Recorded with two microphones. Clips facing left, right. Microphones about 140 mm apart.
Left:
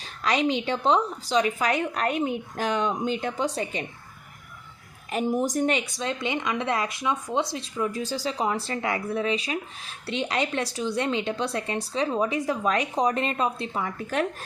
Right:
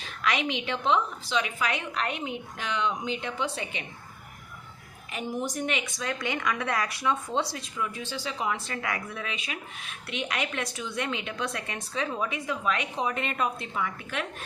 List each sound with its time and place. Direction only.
0.0 s speech: 35° left (ahead or behind)
5.1 s speech: 40° left (ahead or behind); by 7.6 s 20° left (ahead or behind)
7.8 s speech: 40° left (ahead or behind)